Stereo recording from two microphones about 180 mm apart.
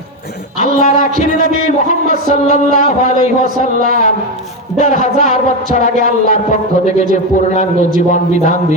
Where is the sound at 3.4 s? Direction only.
50° right (ahead or behind).